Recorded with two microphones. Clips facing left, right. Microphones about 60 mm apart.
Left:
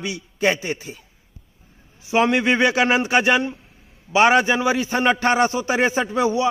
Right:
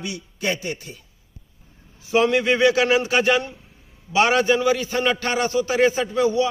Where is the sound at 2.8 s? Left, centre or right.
Left.